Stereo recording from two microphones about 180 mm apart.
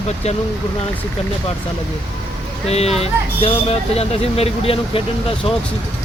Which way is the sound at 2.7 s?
35° left (ahead or behind).